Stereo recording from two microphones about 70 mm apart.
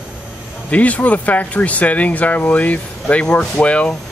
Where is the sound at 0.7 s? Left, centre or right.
Left.